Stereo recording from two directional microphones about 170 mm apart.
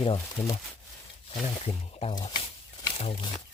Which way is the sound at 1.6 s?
35° left (ahead or behind).